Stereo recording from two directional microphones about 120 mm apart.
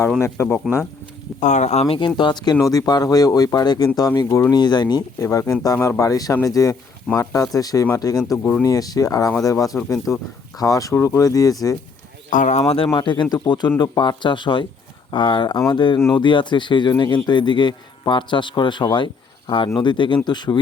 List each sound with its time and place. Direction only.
0.2 s speech: 15° left (ahead or behind)
1.4 s speech: 80° left; by 2.0 s 65° left (ahead or behind)
2.0 s speech: 40° left (ahead or behind)
5.2 s speech: 25° left (ahead or behind)
12.3 s speech: 85° left; by 12.9 s 55° left (ahead or behind)
12.9 s speech: 40° left (ahead or behind)